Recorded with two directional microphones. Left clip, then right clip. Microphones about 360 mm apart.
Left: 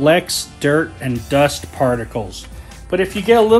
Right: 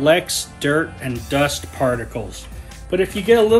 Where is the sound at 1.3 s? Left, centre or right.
Centre.